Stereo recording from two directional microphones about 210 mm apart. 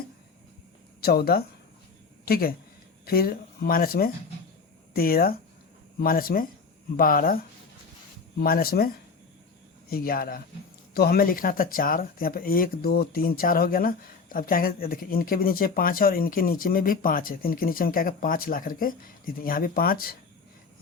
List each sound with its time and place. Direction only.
1.0 s speech: 45° left (ahead or behind)
8.4 s speech: 45° left (ahead or behind)
9.9 s speech: 45° left (ahead or behind)